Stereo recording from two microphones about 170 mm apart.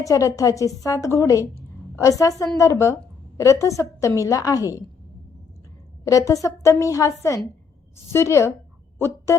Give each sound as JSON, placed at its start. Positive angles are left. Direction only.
{"t": 0.0, "sound": "a woman's voice", "side_deg": 20}
{"t": 6.1, "sound": "a woman's voice", "side_deg": 20}
{"t": 9.0, "sound": "a sound", "side_deg": 15}